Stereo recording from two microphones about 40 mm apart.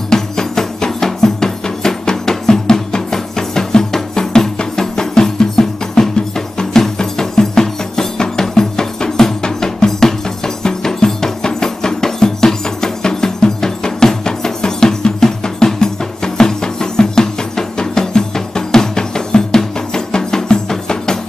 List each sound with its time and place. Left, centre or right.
0.1 s music: centre